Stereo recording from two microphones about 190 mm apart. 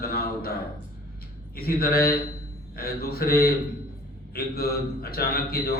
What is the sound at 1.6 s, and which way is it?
Speech, 55° left (ahead or behind).